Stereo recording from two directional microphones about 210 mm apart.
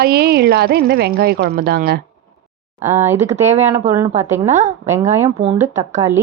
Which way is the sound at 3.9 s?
15° right (ahead or behind).